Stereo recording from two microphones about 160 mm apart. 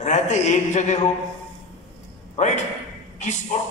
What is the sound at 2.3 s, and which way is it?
Speech, 45° left (ahead or behind).